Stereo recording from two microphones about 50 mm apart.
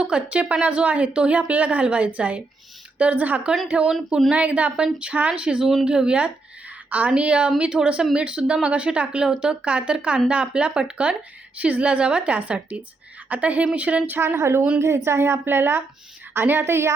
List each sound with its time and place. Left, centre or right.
0.0 s a woman's voice: right
3.8 s speech: centre
4.4 s a woman's voice: right
14.3 s a woman's voice: right